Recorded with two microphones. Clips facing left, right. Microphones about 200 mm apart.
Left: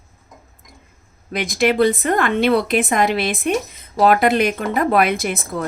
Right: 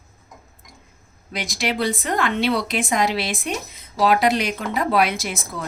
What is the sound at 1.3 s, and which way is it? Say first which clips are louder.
A woman's voice: left 8 dB; 55° left (ahead or behind).